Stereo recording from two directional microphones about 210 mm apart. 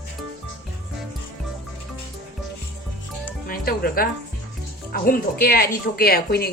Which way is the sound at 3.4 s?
45° left (ahead or behind).